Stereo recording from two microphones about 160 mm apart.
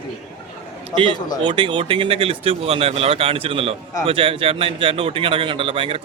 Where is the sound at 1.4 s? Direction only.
30° right (ahead or behind).